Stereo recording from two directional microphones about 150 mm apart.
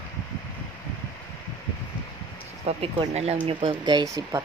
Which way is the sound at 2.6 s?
40° right (ahead or behind).